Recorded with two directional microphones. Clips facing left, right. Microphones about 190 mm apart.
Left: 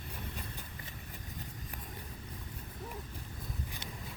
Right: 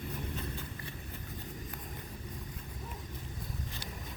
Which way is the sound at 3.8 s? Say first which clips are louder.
Right 1 dB; 20° left (ahead or behind).